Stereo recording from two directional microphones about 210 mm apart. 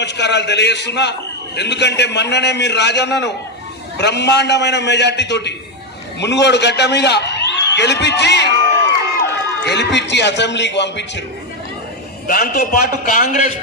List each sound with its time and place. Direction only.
0.0 s a man's voice: 55° left (ahead or behind)
12.3 s a man's voice: 45° left (ahead or behind)